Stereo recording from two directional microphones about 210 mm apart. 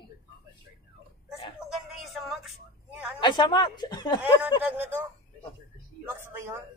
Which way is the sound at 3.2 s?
20° left (ahead or behind).